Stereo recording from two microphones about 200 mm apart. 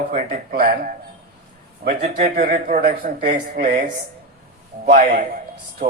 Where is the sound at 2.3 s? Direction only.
45° right (ahead or behind).